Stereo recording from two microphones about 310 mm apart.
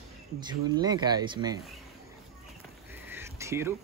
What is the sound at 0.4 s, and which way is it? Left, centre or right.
Speech, centre.